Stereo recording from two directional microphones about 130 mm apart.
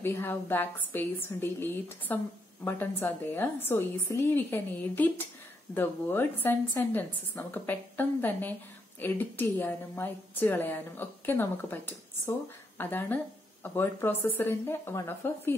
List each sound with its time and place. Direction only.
0.0 s a woman's voice: 20° left (ahead or behind)